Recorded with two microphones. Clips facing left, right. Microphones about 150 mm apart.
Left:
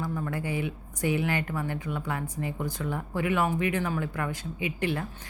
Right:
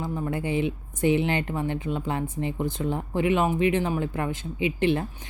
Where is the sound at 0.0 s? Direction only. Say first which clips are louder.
Right 3 dB; 25° right (ahead or behind).